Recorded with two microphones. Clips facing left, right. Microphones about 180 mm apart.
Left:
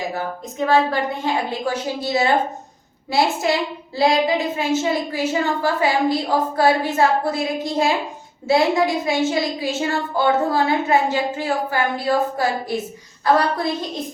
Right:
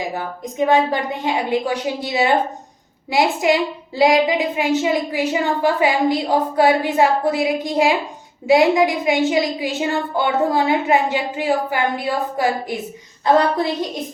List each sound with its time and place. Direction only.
0.1 s a woman's voice: 15° right (ahead or behind)